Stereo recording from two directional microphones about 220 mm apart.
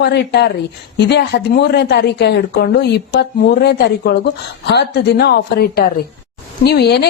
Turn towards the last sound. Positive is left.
turn(degrees=50)  # may be behind; listen again after turning